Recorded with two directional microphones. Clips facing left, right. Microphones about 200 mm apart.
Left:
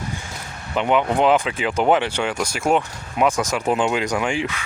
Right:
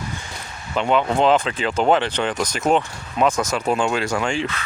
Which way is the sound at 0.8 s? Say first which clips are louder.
Even; 15° left (ahead or behind).